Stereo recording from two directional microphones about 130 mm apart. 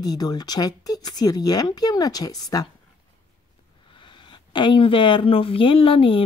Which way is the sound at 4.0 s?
40° left (ahead or behind).